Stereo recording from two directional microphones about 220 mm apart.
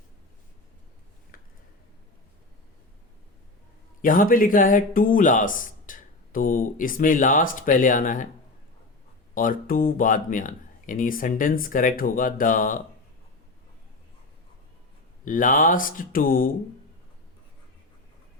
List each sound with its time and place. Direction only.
1.3 s a sound: 40° left (ahead or behind)
4.0 s speech: 40° left (ahead or behind)
9.3 s speech: 40° left (ahead or behind)
15.2 s speech: 35° left (ahead or behind)